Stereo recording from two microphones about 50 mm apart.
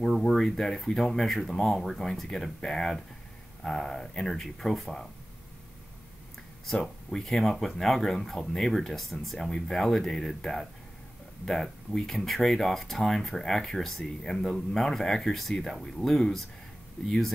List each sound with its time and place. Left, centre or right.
0.3 s speech: centre
6.7 s speech: centre